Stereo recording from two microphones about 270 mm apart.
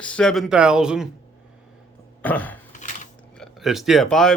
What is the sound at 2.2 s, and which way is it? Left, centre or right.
Speech, centre.